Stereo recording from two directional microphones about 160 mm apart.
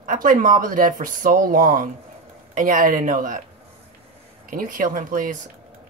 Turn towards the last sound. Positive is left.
turn(degrees=-60)  # may be behind; listen again after turning